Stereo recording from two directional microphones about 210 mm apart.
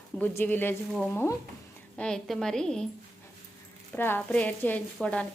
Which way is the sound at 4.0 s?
10° left (ahead or behind).